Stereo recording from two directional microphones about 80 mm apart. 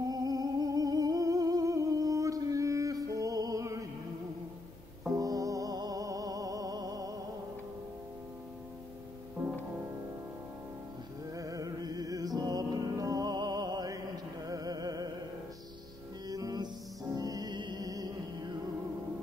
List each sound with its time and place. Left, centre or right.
0.0 s music: right
5.1 s music: right
11.3 s music: right
16.3 s music: right